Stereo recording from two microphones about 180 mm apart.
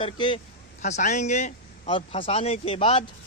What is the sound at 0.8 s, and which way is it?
Speech, 40° left (ahead or behind).